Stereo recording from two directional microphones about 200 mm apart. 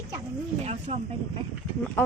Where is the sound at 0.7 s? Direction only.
30° right (ahead or behind).